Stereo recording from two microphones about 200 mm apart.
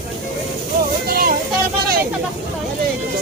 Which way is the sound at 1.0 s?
50° right (ahead or behind).